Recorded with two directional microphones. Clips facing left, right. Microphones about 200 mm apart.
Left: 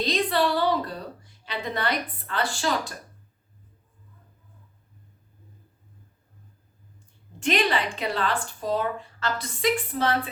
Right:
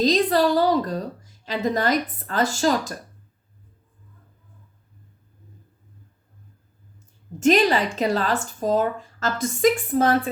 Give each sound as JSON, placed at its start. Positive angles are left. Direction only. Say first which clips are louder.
{"t": 0.0, "sound": "a woman's voice", "louder": "right 5 dB", "side_deg": -40}
{"t": 7.3, "sound": "a woman's voice", "louder": "right 7 dB", "side_deg": -40}